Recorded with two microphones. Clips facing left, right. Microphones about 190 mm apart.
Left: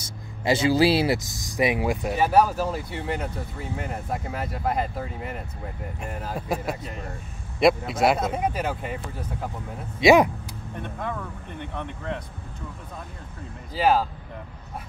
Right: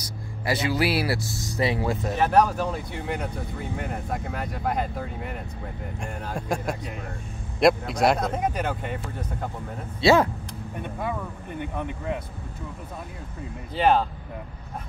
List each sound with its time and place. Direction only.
0.0 s speech: 25° left (ahead or behind); by 9.5 s 5° left (ahead or behind)
9.9 s speech: 15° left (ahead or behind)
10.8 s speech: 10° right (ahead or behind)
13.7 s speech: 5° left (ahead or behind)